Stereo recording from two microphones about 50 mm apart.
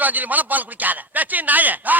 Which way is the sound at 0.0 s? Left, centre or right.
Right.